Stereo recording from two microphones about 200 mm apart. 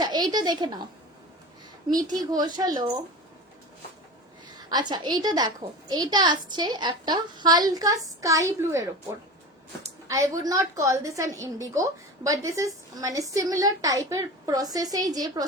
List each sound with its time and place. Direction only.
0.0 s a woman's voice: 20° right (ahead or behind)
2.0 s a woman's voice: 20° right (ahead or behind)
4.5 s a woman's voice: 20° right (ahead or behind)